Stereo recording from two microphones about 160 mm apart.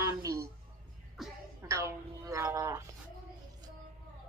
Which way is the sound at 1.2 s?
Centre (ahead or behind).